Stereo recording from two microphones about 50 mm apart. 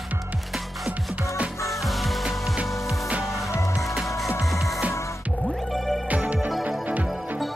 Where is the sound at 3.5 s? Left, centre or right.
Left.